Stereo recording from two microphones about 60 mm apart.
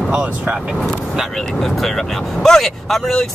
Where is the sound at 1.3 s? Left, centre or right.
Centre.